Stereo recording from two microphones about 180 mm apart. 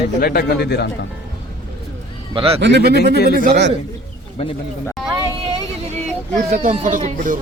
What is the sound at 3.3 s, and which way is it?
Speech, 50° right (ahead or behind).